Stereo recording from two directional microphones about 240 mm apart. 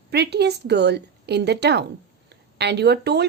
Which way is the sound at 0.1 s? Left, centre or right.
Right.